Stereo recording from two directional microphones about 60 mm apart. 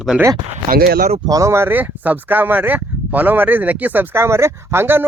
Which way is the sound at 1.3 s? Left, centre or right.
Right.